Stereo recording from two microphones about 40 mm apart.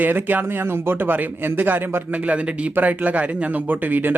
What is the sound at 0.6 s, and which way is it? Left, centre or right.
Speech, right.